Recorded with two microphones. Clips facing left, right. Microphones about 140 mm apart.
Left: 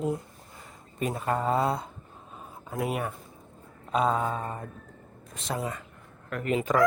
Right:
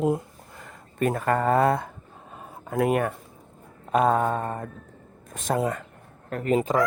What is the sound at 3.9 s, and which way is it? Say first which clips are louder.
Mantra: right 5 dB; 55° right (ahead or behind).